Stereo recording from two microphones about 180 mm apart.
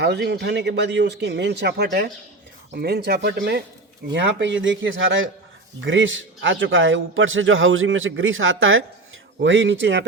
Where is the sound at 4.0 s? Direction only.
80° right.